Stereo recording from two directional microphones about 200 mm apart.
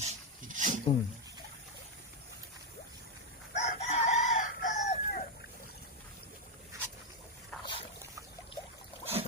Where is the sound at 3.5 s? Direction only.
35° left (ahead or behind).